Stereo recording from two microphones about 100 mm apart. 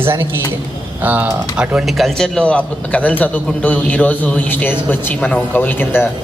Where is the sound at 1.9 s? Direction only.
Centre (ahead or behind); by 6.0 s 20° left (ahead or behind).